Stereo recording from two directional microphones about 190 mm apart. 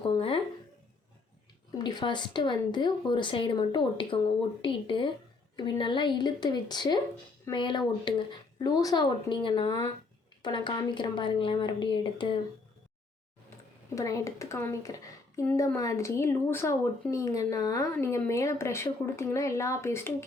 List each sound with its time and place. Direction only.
0.0 s a sound: 25° left (ahead or behind)
1.8 s speech: 25° left (ahead or behind)
13.9 s speech: 15° left (ahead or behind)